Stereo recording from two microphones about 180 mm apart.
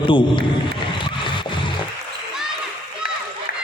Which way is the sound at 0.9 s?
25° left (ahead or behind).